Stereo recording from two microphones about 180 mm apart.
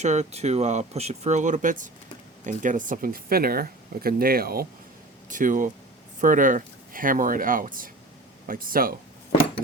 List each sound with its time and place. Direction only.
0.0 s speech: 40° right (ahead or behind)